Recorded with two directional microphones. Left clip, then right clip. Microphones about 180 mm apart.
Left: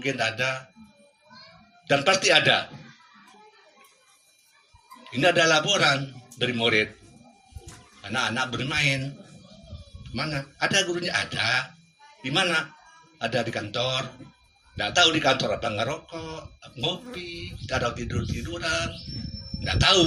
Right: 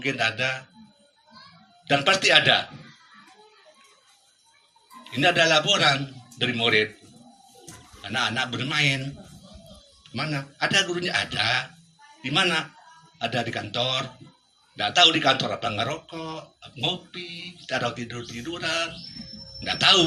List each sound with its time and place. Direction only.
0.0 s speech: 35° left (ahead or behind)
1.9 s speech: 35° left (ahead or behind)
5.1 s speech: 35° left (ahead or behind)
8.0 s speech: 35° left (ahead or behind)
10.0 s speech: 35° left (ahead or behind)